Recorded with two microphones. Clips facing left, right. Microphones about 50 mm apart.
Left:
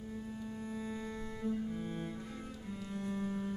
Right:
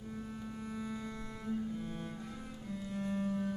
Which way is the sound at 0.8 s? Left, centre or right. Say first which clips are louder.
Even; centre.